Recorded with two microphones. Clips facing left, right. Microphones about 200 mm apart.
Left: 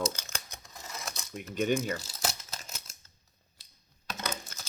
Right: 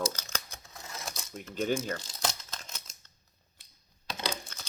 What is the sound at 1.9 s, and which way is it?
Crumpling, 10° left (ahead or behind).